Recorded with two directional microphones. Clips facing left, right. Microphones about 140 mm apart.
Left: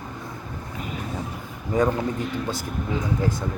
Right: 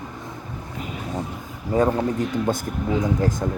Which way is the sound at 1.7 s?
30° right (ahead or behind).